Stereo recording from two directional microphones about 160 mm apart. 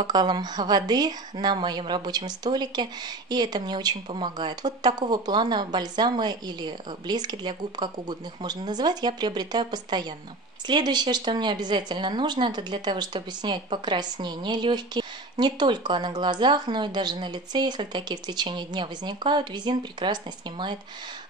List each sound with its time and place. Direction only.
0.0 s a woman's voice: 25° right (ahead or behind)